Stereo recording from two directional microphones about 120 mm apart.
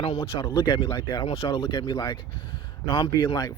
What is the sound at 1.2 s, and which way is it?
Speech, 50° left (ahead or behind).